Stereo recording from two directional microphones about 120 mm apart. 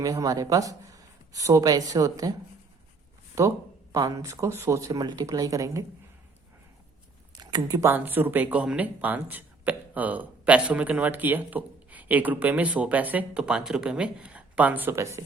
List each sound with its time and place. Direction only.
0.0 s speech: 30° right (ahead or behind)
3.4 s speech: 25° right (ahead or behind)
7.3 s a sound: 35° right (ahead or behind)
7.9 s speech: 15° right (ahead or behind)